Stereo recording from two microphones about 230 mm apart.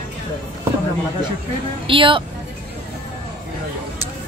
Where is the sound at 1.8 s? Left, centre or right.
Right.